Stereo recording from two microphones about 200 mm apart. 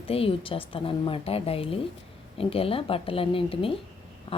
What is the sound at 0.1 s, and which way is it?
A woman's voice, 30° left (ahead or behind).